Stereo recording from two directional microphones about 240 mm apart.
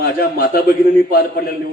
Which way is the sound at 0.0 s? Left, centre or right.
Left.